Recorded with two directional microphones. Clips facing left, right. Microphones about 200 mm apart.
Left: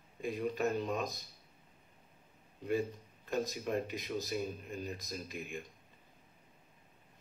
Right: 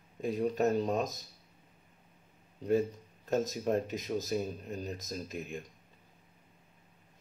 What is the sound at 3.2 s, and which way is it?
Speech, 40° right (ahead or behind).